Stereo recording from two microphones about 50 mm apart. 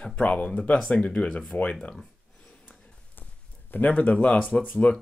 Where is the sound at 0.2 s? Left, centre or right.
Left.